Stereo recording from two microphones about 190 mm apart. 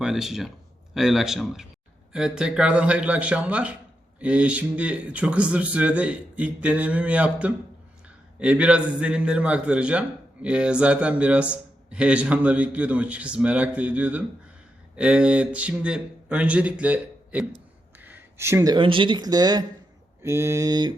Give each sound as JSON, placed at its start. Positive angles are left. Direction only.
{"t": 0.0, "sound": "a man's voice", "side_deg": 0}